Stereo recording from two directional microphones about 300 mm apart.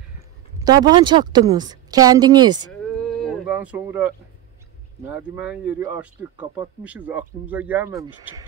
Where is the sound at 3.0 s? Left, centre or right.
Centre.